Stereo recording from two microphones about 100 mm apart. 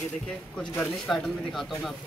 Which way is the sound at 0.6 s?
5° left (ahead or behind).